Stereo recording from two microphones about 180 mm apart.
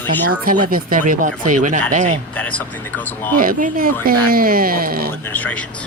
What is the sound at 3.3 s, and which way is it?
Speech, 50° right (ahead or behind).